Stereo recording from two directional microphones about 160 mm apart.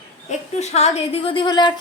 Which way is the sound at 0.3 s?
45° left (ahead or behind).